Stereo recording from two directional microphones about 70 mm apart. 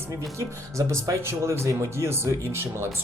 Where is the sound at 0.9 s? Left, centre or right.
Right.